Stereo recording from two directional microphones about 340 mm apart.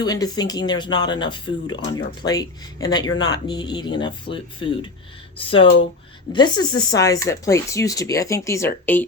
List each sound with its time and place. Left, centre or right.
0.0 s speech: centre